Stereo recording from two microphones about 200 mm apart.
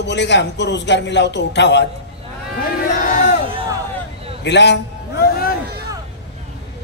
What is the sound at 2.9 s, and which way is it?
Crowd, 45° left (ahead or behind).